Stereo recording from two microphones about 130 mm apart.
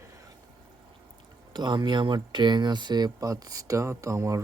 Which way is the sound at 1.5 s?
35° right (ahead or behind).